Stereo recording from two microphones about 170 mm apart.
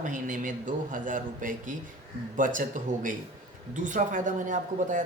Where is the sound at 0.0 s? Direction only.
50° right (ahead or behind).